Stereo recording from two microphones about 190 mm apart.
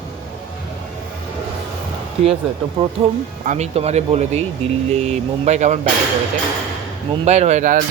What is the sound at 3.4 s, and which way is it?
Speech, 35° right (ahead or behind).